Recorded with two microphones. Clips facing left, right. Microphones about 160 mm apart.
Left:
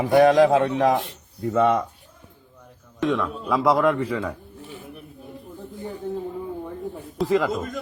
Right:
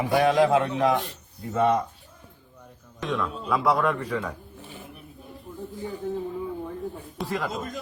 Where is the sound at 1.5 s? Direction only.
65° left (ahead or behind).